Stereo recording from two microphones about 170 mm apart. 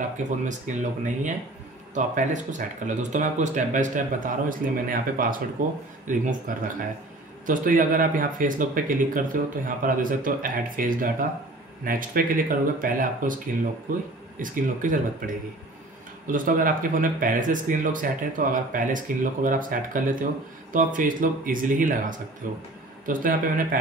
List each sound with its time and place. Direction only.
0.5 s speech: 45° right (ahead or behind)